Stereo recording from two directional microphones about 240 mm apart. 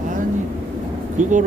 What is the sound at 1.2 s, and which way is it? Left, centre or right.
Speech, right.